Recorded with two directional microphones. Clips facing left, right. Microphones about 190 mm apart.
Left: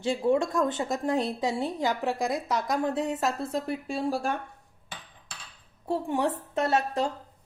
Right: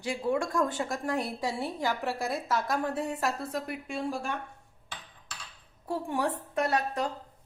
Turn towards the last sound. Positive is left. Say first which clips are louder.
# left 3 dB
turn(degrees=25)  # may be behind; listen again after turning